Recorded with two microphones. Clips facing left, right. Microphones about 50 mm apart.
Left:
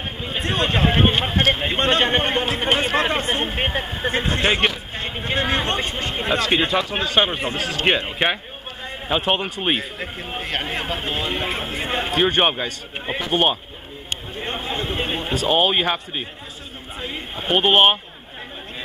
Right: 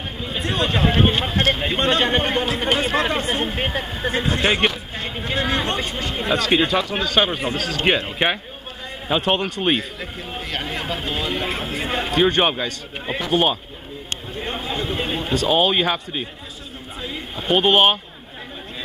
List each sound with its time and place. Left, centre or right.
0.7 s speech: centre
4.3 s a sound: centre
5.0 s a sound: centre
5.8 s speech: centre
9.1 s speech: centre
9.9 s speech: left; by 13.3 s centre
13.3 s speech: left
14.4 s a man's voice: centre